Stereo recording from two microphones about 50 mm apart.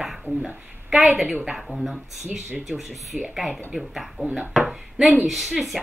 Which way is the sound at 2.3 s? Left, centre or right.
Right.